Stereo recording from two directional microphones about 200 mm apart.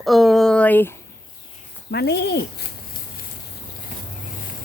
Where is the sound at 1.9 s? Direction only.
55° left (ahead or behind).